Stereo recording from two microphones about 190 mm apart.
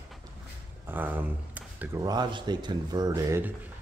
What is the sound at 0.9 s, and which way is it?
Speech, 10° right (ahead or behind).